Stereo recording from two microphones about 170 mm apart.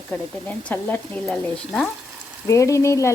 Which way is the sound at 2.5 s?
20° left (ahead or behind).